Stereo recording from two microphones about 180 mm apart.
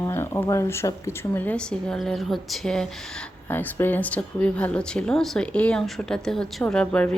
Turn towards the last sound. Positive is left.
turn(degrees=5)  # may be behind; listen again after turning